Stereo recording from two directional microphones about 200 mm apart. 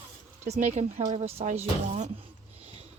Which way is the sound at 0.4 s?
35° right (ahead or behind).